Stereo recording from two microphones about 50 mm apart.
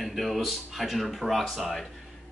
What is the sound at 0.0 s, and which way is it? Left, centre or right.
Speech, centre.